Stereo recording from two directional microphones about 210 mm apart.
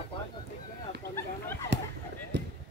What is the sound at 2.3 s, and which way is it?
Basketball bounce, 55° right (ahead or behind).